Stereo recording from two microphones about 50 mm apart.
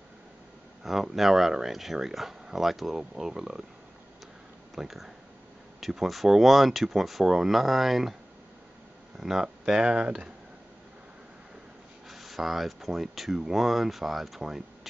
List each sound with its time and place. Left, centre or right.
0.8 s speech: centre
4.7 s speech: centre
9.2 s speech: centre
12.1 s speech: centre